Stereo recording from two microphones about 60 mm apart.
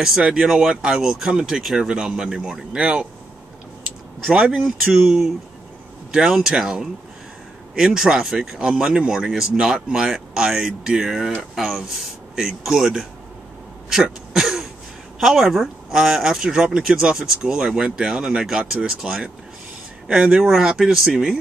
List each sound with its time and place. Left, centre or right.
0.2 s speech: centre
4.3 s speech: centre
4.9 s speech: centre
13.8 s throat clearing: centre
15.1 s speech: centre